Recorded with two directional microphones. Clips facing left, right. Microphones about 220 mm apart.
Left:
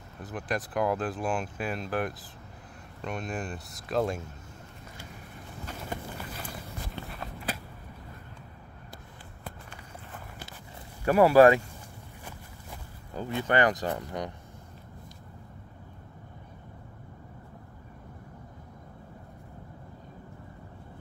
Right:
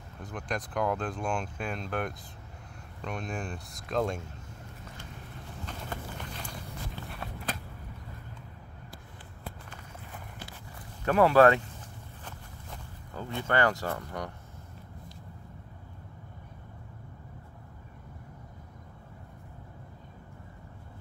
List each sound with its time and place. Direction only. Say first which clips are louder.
0.2 s speech: left 3 dB; 5° left (ahead or behind)
5.7 s walk: left 3 dB; 5° left (ahead or behind)
11.1 s speech: left 3 dB; 10° left (ahead or behind)
13.1 s speech: left 3 dB; 15° left (ahead or behind)